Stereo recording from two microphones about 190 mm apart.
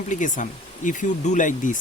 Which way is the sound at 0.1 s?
40° left (ahead or behind).